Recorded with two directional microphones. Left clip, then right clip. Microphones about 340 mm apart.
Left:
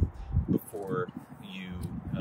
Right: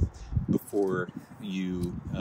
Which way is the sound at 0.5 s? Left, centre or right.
Centre.